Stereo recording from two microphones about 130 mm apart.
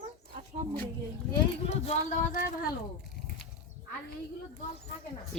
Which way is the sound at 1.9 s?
65° left (ahead or behind).